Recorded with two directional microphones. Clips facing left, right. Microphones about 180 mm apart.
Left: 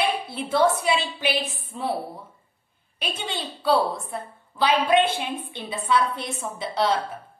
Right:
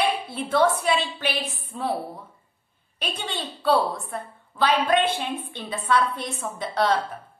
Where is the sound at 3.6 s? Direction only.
5° left (ahead or behind).